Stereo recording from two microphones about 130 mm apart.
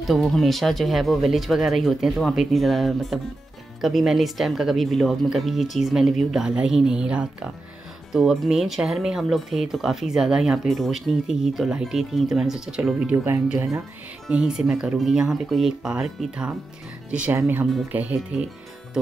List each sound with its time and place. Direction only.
0.0 s speech: centre (ahead or behind)
13.1 s speech: 15° right (ahead or behind)
14.3 s speech: 5° right (ahead or behind)